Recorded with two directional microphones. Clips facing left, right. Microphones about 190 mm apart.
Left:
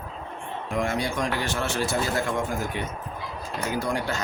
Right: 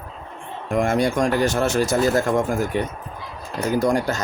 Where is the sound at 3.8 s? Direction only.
45° right (ahead or behind).